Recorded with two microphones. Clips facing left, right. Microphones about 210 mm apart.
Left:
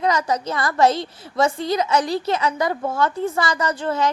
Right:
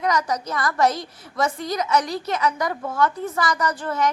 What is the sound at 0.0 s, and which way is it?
A woman's voice, 25° left (ahead or behind).